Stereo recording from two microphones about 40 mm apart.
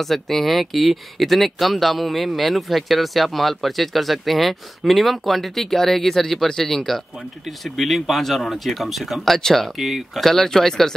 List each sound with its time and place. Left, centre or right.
0.0 s speech: centre
9.8 s speech: centre